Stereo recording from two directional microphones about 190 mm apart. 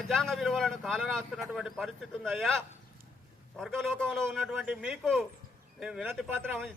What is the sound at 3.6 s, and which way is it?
Speech, centre (ahead or behind).